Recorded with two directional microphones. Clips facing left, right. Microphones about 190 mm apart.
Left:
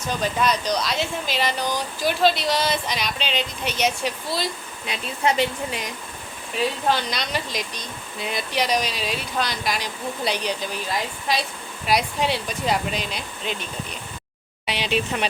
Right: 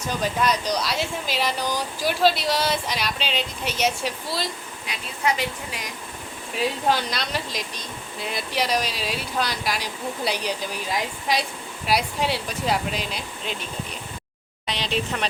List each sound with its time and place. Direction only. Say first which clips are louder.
0.2 s speech: even; 10° right (ahead or behind)
4.9 s a woman's voice: left 3 dB; 25° left (ahead or behind)
6.8 s speech: even; 5° right (ahead or behind)
15.1 s a woman's voice: left 2 dB; 10° left (ahead or behind)